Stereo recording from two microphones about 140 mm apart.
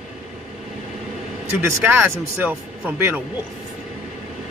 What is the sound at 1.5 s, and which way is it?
Speech, 15° right (ahead or behind).